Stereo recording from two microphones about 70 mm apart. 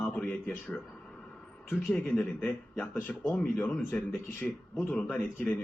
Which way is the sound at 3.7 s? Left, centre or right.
Centre.